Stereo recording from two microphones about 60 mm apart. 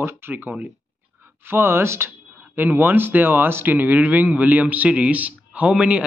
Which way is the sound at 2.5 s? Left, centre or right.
Right.